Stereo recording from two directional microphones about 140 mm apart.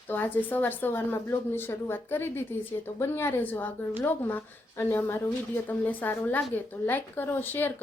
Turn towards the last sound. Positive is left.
turn(degrees=15)  # may be behind; listen again after turning